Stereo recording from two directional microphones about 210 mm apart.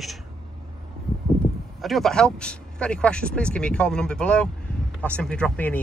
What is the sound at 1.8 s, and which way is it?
Speech, centre (ahead or behind).